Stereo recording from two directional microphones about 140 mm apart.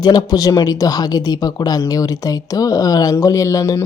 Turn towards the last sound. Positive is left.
turn(degrees=20)  # may be behind; listen again after turning